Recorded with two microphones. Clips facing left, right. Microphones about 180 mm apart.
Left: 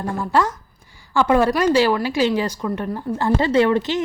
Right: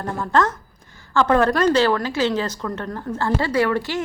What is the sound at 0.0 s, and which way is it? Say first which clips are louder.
Speech: even; 10° left (ahead or behind).